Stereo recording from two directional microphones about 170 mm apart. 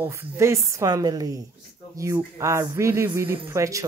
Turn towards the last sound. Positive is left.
turn(degrees=-20)  # may be behind; listen again after turning